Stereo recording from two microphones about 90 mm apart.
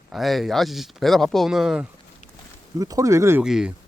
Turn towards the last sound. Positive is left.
turn(degrees=-5)  # may be behind; listen again after turning